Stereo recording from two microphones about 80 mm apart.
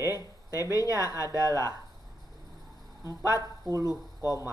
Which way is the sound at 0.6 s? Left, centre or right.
Left.